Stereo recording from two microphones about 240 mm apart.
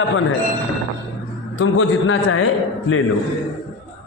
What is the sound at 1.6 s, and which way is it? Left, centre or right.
Speech, left.